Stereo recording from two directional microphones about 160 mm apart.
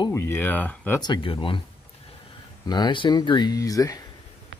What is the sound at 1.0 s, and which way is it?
Speech, 30° left (ahead or behind).